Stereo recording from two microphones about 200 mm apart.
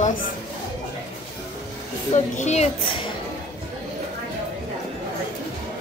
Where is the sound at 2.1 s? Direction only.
35° left (ahead or behind).